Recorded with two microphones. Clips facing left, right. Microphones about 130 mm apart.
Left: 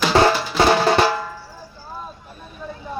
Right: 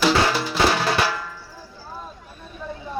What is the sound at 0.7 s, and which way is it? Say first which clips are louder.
Drum: left 6 dB; 35° left (ahead or behind).